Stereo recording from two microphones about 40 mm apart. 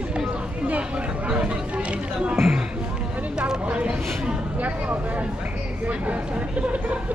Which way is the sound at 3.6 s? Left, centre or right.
Right.